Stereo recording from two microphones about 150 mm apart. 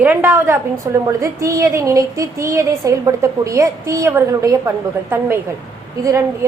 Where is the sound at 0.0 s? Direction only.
10° right (ahead or behind).